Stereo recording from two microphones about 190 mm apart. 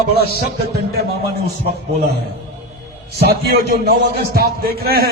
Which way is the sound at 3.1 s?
60° right (ahead or behind).